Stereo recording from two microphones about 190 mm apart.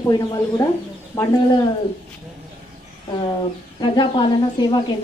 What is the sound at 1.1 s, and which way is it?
Speech, 20° left (ahead or behind).